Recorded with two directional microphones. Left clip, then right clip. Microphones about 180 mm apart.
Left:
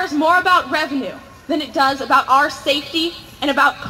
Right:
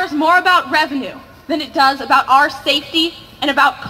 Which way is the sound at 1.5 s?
65° right (ahead or behind).